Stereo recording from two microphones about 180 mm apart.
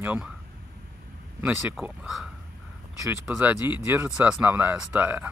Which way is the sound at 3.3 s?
10° right (ahead or behind).